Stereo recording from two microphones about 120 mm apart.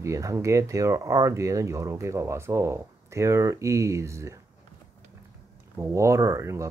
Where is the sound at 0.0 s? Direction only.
25° right (ahead or behind).